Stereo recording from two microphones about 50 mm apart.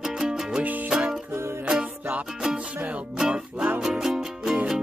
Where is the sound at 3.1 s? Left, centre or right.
Centre.